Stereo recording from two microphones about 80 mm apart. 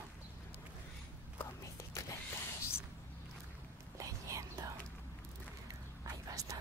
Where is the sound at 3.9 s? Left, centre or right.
Right.